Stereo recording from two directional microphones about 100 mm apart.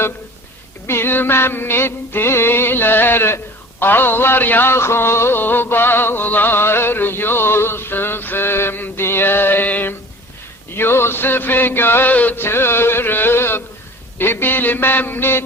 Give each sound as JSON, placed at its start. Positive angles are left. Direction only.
{"t": 0.9, "sound": "music", "side_deg": 25}
{"t": 10.8, "sound": "mantra", "side_deg": 25}
{"t": 14.2, "sound": "music", "side_deg": 20}